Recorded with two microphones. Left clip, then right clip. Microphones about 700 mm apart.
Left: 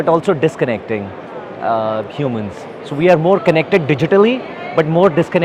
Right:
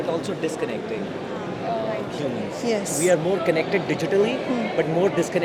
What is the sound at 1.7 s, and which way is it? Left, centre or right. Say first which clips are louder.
Speech: left 11 dB; left.